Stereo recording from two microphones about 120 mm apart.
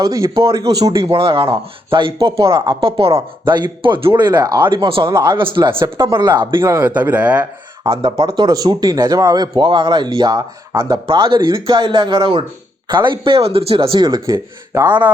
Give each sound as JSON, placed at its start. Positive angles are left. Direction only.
{"t": 0.0, "sound": "a man's voice", "side_deg": -30}
{"t": 1.1, "sound": "speech", "side_deg": -50}
{"t": 2.3, "sound": "a man's voice", "side_deg": -25}
{"t": 2.6, "sound": "speech", "side_deg": -45}
{"t": 5.1, "sound": "a man's voice", "side_deg": -30}
{"t": 5.4, "sound": "speech", "side_deg": -45}
{"t": 6.6, "sound": "speech", "side_deg": -20}
{"t": 7.9, "sound": "speech", "side_deg": -45}
{"t": 11.0, "sound": "speech", "side_deg": -45}
{"t": 14.8, "sound": "speech", "side_deg": -15}